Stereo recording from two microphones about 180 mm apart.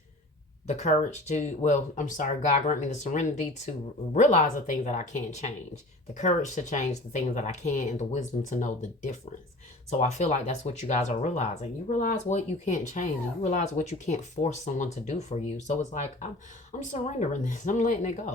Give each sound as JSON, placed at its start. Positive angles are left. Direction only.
{"t": 0.7, "sound": "speech", "side_deg": 40}